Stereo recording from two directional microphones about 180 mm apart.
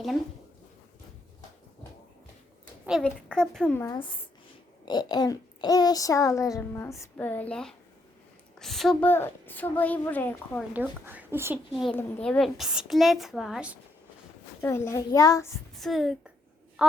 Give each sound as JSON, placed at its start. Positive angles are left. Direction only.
{"t": 3.0, "sound": "a woman's voice", "side_deg": 5}
{"t": 3.8, "sound": "a child's voice", "side_deg": 25}
{"t": 10.8, "sound": "speech", "side_deg": -10}
{"t": 11.9, "sound": "a woman's voice", "side_deg": 5}
{"t": 14.6, "sound": "a woman's voice", "side_deg": 15}
{"t": 15.7, "sound": "a woman's voice", "side_deg": 0}